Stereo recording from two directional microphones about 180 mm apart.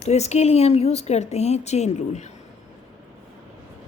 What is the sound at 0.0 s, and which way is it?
Speech, 40° left (ahead or behind).